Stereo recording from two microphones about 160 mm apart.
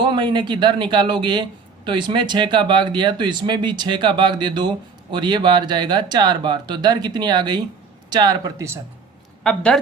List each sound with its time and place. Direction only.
0.0 s a man's voice: 30° right (ahead or behind)
9.4 s speech: 5° left (ahead or behind)